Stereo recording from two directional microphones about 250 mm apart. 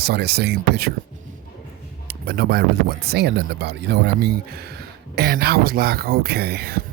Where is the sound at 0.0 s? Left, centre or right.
Right.